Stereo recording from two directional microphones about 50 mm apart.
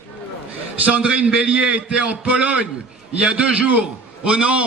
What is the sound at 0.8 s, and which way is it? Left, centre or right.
A man's voice, right.